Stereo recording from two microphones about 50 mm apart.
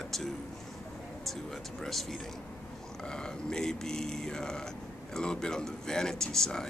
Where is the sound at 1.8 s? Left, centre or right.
Centre.